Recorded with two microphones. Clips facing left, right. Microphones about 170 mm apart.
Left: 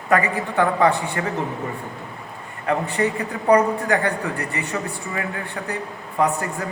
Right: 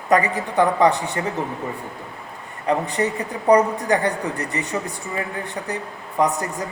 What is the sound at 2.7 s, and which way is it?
A woman's voice, 15° right (ahead or behind).